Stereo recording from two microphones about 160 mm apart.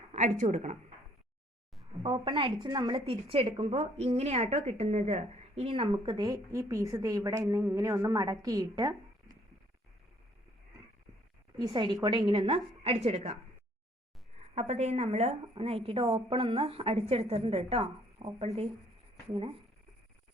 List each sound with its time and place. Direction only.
0.1 s speech: 45° right (ahead or behind)
2.2 s a woman's voice: 30° right (ahead or behind)
5.9 s a woman's voice: 25° right (ahead or behind)
11.5 s a woman's voice: 25° right (ahead or behind); by 13.3 s 45° right (ahead or behind)
14.5 s a woman's voice: 45° right (ahead or behind)